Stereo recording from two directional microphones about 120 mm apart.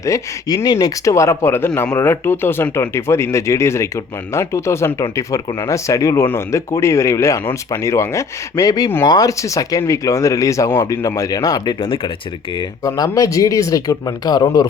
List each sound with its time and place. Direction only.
0.0 s speech: 30° left (ahead or behind); by 12.1 s 45° left (ahead or behind)
12.8 s speech: 30° left (ahead or behind)